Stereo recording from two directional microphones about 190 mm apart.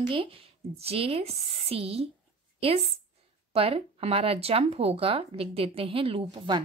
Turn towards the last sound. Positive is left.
turn(degrees=-25)  # may be behind; listen again after turning